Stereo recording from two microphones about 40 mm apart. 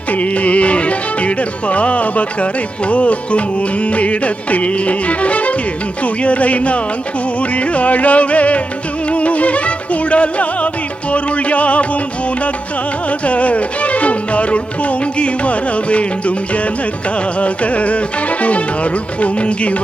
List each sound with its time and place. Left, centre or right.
0.1 s music: left
13.1 s music: left
17.4 s music: left